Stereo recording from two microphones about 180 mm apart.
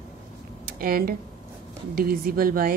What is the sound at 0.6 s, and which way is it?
Speech, 55° right (ahead or behind).